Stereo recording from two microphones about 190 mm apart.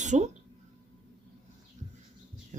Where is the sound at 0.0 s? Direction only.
40° right (ahead or behind).